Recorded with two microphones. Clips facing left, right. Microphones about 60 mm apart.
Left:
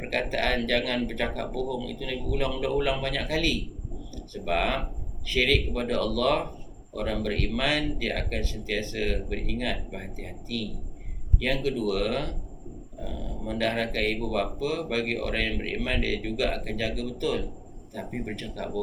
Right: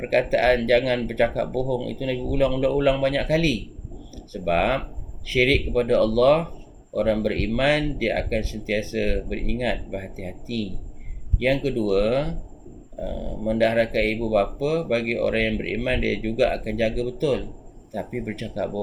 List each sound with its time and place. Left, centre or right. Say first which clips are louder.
0.1 s speech: right 8 dB; right
11.3 s speech: right 5 dB; right
13.6 s speech: right 7 dB; right